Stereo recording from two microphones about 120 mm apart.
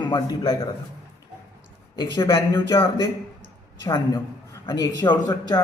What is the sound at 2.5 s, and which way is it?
Speech, 25° left (ahead or behind).